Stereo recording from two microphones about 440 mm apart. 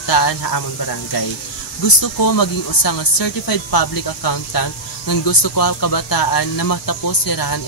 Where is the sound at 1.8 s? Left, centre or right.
Left.